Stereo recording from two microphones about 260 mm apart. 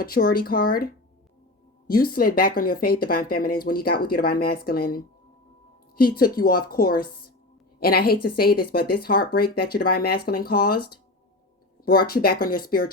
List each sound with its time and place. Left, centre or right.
0.0 s speech: left
1.9 s speech: left
11.9 s speech: left